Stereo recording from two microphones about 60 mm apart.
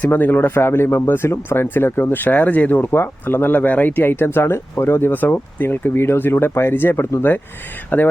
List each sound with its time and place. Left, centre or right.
0.0 s speech: left
5.1 s speech: left